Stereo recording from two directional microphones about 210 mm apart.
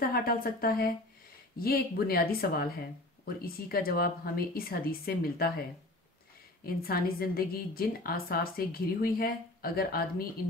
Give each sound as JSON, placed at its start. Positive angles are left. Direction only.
{"t": 0.0, "sound": "a woman's voice", "side_deg": 45}
{"t": 6.6, "sound": "a woman's voice", "side_deg": 45}